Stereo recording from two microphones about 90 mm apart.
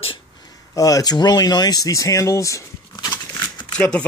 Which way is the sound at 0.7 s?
40° left (ahead or behind).